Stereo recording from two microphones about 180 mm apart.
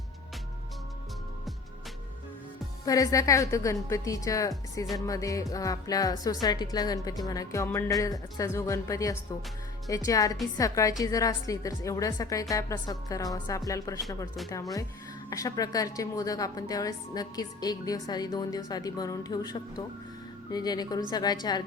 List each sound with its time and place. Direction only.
2.8 s a woman's voice: 20° left (ahead or behind)